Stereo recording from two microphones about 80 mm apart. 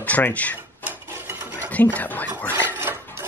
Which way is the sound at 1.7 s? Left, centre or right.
Left.